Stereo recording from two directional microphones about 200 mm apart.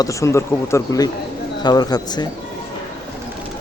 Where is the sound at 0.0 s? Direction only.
15° left (ahead or behind).